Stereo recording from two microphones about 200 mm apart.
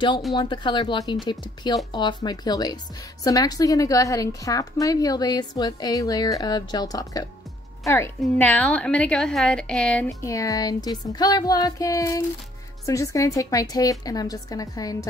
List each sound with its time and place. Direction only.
0.3 s a woman's voice: 20° left (ahead or behind)